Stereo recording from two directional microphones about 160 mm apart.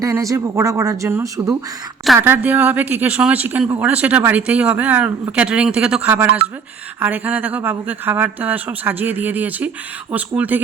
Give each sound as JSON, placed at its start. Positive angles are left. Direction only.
{"t": 0.0, "sound": "speech", "side_deg": -20}